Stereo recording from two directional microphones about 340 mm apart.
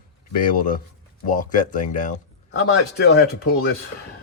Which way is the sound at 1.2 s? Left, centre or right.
Left.